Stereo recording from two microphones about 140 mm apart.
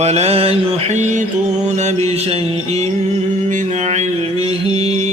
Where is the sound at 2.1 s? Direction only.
45° right (ahead or behind).